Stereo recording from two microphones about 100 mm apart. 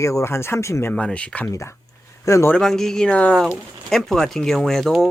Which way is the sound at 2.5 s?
5° left (ahead or behind).